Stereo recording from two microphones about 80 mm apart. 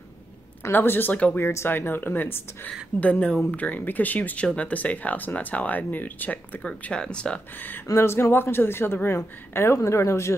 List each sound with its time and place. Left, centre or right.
0.7 s speech: left
1.4 s speech: left; by 7.3 s centre
7.9 s speech: left